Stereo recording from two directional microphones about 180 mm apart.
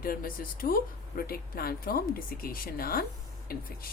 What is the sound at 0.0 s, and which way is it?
A woman's voice, 55° left (ahead or behind).